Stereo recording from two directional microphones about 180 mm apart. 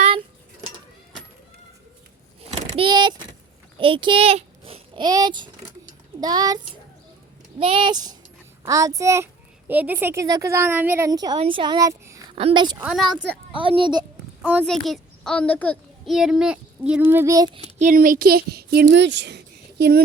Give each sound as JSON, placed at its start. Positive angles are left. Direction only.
{"t": 2.6, "sound": "vehicle", "side_deg": -35}
{"t": 3.8, "sound": "a child's voice", "side_deg": -30}
{"t": 7.6, "sound": "a child's voice", "side_deg": -30}
{"t": 12.4, "sound": "speech", "side_deg": -30}
{"t": 12.8, "sound": "a woman's voice", "side_deg": -5}
{"t": 13.5, "sound": "speech", "side_deg": -30}
{"t": 14.7, "sound": "a child's voice", "side_deg": 0}
{"t": 17.7, "sound": "speech", "side_deg": -45}